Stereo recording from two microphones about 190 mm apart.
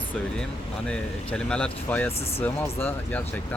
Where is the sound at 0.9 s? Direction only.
5° left (ahead or behind).